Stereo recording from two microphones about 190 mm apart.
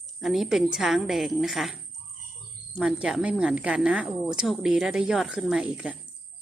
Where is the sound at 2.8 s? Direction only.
5° right (ahead or behind).